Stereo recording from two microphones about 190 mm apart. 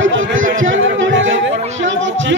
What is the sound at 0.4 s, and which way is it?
Chatter, 45° right (ahead or behind).